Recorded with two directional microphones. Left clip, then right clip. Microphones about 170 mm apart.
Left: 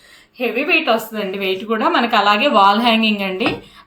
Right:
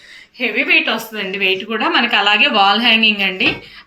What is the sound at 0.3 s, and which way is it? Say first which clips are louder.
A woman's voice: right 2 dB; 40° left (ahead or behind).